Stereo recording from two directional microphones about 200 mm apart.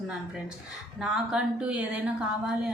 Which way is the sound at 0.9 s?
5° right (ahead or behind).